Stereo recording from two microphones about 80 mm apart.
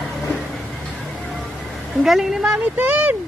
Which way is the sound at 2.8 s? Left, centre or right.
Centre.